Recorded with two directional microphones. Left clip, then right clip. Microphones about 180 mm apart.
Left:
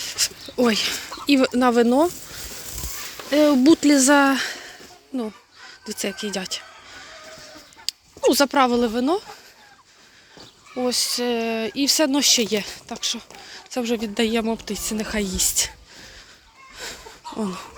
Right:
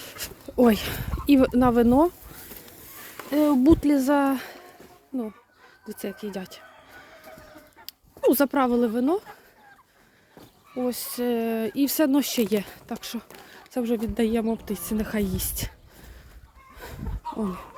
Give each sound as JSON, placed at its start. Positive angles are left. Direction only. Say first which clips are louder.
{"t": 0.0, "sound": "speech", "louder": "left 12 dB", "side_deg": -25}
{"t": 3.2, "sound": "speech", "louder": "left 4 dB", "side_deg": -5}
{"t": 7.9, "sound": "a sound", "louder": "left 16 dB", "side_deg": -20}
{"t": 8.3, "sound": "speech", "louder": "left 4 dB", "side_deg": -20}
{"t": 10.8, "sound": "speech", "louder": "left 6 dB", "side_deg": -15}
{"t": 13.0, "sound": "speech", "louder": "left 10 dB", "side_deg": -40}
{"t": 13.7, "sound": "speech", "louder": "left 2 dB", "side_deg": -20}
{"t": 16.7, "sound": "a sound", "louder": "left 6 dB", "side_deg": -15}